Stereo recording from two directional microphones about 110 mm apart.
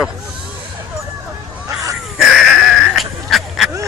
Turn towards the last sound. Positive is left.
turn(degrees=0)  # may be behind; listen again after turning